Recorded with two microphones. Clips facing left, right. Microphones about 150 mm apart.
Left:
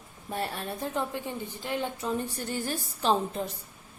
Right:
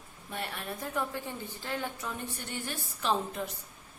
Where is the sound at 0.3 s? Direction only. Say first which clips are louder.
Left 5 dB; 35° left (ahead or behind).